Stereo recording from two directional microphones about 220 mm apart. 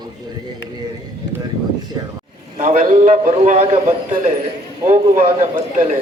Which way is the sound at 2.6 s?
35° right (ahead or behind).